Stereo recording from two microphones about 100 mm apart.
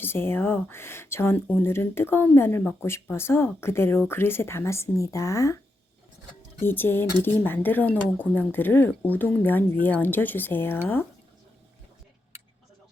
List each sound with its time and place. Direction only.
0.0 s speech: 25° left (ahead or behind)
6.6 s speech: 20° left (ahead or behind)